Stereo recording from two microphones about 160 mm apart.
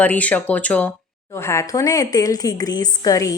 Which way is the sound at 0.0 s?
10° left (ahead or behind).